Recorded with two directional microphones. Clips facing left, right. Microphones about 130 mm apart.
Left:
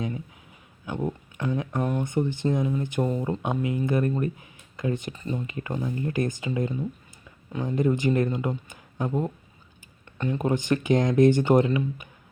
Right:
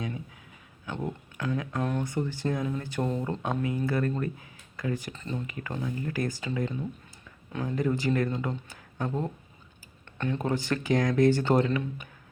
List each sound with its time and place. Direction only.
0.9 s speech: 15° left (ahead or behind)
5.1 s speech: 10° left (ahead or behind)
5.5 s speech: 25° left (ahead or behind); by 12.0 s 5° left (ahead or behind)